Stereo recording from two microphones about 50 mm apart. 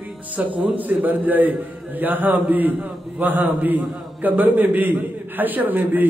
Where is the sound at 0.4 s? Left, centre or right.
Right.